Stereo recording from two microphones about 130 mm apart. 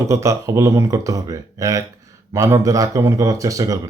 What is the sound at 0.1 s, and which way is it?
Speech, 25° right (ahead or behind).